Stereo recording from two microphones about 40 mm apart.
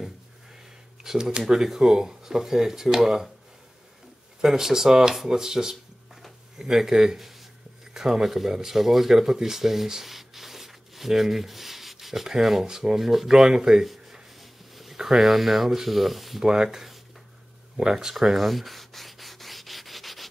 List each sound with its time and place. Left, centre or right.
1.0 s speech: centre
4.4 s speech: centre
7.2 s a sound: centre
7.9 s speech: centre
14.4 s dog: centre
15.0 s speech: centre
16.4 s rub: centre
17.7 s speech: centre
18.1 s rub: centre